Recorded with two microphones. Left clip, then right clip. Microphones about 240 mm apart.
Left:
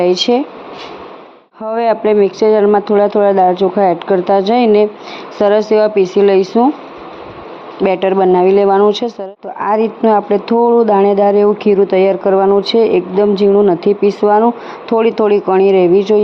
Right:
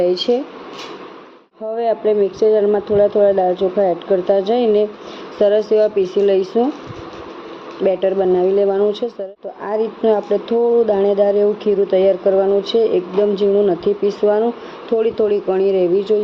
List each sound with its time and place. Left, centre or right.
0.0 s speech: left
1.7 s speech: left
7.9 s speech: left